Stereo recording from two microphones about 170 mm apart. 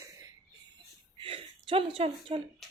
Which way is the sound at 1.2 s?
30° right (ahead or behind).